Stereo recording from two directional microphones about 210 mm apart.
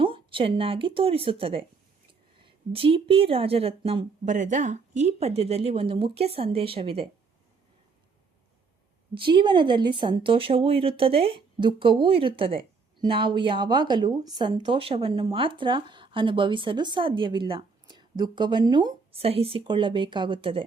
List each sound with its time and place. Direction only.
0.0 s speech: 25° right (ahead or behind)
9.1 s speech: 25° right (ahead or behind)